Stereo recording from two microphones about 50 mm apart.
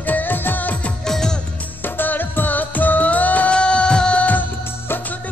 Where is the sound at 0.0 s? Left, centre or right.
Left.